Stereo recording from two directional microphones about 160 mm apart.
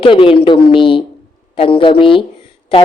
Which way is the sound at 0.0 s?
35° left (ahead or behind).